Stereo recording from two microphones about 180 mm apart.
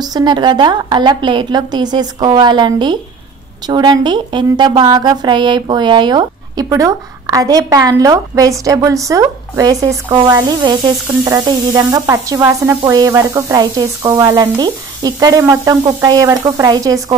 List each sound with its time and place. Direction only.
0.0 s a woman's voice: 25° right (ahead or behind)